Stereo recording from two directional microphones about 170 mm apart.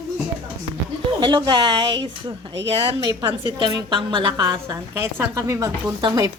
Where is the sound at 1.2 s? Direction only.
25° right (ahead or behind).